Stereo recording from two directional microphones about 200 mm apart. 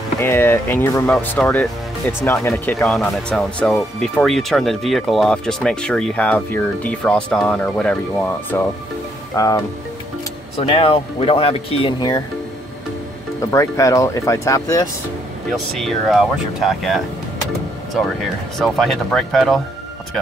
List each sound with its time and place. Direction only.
0.2 s speech: 10° left (ahead or behind)
10.6 s speech: 30° left (ahead or behind)
13.4 s speech: 15° left (ahead or behind)
15.5 s speech: centre (ahead or behind)
18.6 s speech: centre (ahead or behind)